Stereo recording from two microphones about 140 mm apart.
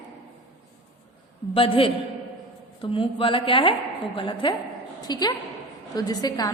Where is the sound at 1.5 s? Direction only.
40° left (ahead or behind).